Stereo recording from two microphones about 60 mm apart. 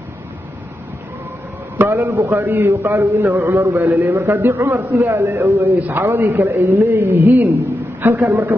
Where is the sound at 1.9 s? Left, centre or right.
Right.